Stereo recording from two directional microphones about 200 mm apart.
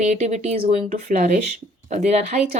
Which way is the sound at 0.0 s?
35° right (ahead or behind).